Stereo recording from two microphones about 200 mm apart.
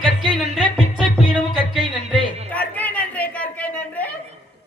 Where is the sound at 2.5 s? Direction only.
5° left (ahead or behind).